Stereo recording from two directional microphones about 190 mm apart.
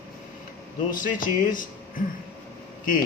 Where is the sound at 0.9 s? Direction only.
45° left (ahead or behind).